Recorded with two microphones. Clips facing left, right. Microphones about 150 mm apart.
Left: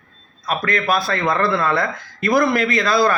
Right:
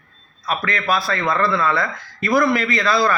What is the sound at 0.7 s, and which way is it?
A man's voice, 50° left (ahead or behind).